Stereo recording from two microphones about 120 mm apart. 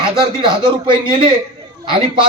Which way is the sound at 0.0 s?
45° right (ahead or behind).